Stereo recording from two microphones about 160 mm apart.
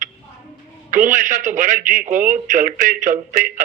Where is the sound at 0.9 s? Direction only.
55° right (ahead or behind).